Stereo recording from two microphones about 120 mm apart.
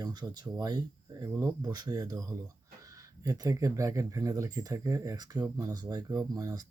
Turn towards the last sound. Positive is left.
turn(degrees=-35)  # may be behind; listen again after turning